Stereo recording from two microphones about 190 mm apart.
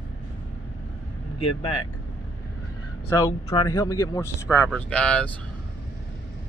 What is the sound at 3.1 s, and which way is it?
Speech, 15° left (ahead or behind).